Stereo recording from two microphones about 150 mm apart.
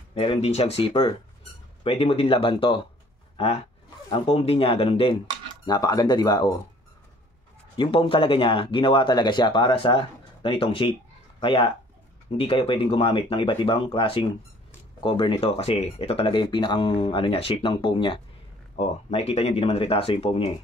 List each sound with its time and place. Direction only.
0.1 s speech: 40° left (ahead or behind)
5.7 s speech: 25° left (ahead or behind)
7.7 s speech: 35° left (ahead or behind)